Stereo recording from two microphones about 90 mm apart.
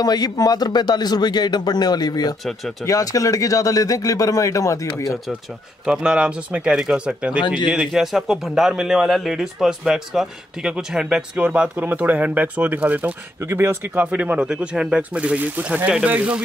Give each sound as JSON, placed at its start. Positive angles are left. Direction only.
{"t": 0.0, "sound": "speech", "side_deg": 45}
{"t": 5.9, "sound": "a man's voice", "side_deg": -10}